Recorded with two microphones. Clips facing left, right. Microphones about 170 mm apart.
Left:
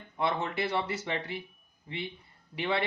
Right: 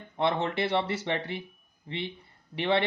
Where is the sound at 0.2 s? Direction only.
30° right (ahead or behind).